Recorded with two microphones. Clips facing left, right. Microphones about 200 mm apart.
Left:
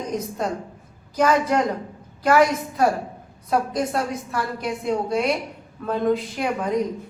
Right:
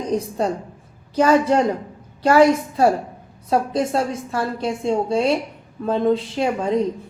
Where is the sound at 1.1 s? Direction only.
30° right (ahead or behind).